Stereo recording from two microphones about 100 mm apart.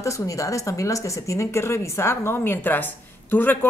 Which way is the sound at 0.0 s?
30° left (ahead or behind).